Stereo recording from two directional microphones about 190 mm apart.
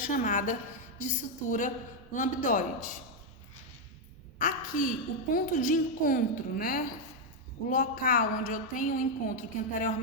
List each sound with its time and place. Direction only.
0.0 s a woman's voice: 45° left (ahead or behind)
4.4 s a woman's voice: 45° left (ahead or behind)